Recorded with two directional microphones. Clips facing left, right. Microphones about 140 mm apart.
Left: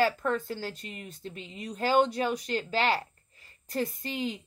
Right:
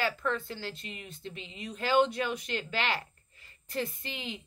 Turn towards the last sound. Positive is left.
turn(degrees=40)  # may be behind; listen again after turning